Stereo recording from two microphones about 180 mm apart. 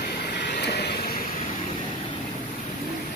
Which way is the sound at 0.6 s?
65° left (ahead or behind).